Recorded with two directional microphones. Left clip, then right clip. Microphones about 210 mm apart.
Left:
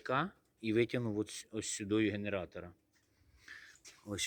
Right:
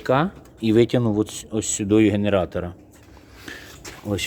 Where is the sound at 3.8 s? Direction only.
5° left (ahead or behind).